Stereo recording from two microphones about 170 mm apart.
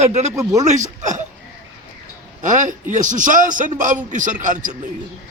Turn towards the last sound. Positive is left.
turn(degrees=-50)  # may be behind; listen again after turning